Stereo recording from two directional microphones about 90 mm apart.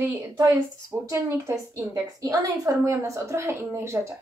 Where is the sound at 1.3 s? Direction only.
35° right (ahead or behind).